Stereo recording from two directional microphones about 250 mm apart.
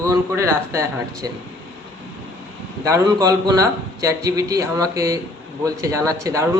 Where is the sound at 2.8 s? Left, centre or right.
Centre.